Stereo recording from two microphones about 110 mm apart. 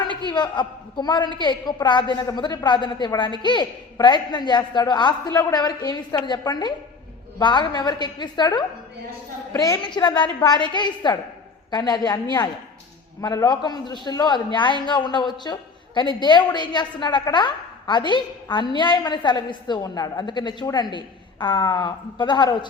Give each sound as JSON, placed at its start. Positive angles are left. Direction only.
{"t": 0.3, "sound": "a woman's voice", "side_deg": 45}
{"t": 5.3, "sound": "a woman's voice", "side_deg": 25}
{"t": 5.5, "sound": "a man's voice", "side_deg": 35}
{"t": 9.6, "sound": "a man's voice", "side_deg": 30}
{"t": 9.8, "sound": "a woman's voice", "side_deg": 45}